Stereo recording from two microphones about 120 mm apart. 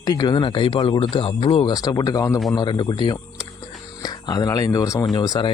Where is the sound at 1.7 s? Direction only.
35° left (ahead or behind).